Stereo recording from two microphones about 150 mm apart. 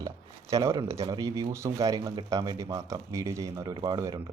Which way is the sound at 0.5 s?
20° right (ahead or behind).